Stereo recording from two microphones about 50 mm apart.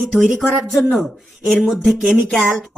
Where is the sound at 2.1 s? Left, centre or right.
Centre.